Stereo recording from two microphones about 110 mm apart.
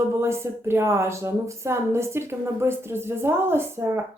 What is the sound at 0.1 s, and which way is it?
Speech, 25° right (ahead or behind).